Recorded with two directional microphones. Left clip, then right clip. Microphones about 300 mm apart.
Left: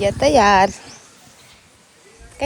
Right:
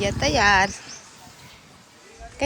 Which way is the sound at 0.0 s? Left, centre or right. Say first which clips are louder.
Left 6 dB; centre.